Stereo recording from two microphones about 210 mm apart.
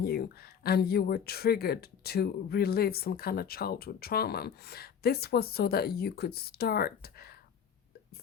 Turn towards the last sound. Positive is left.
turn(degrees=45)  # may be behind; listen again after turning